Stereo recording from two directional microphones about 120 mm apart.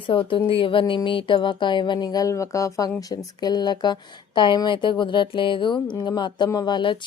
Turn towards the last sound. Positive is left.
turn(degrees=40)  # may be behind; listen again after turning